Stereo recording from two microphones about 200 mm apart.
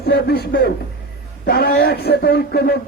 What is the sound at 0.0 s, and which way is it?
Speech, 50° left (ahead or behind).